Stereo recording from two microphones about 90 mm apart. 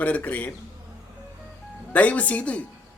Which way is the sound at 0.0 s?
15° left (ahead or behind).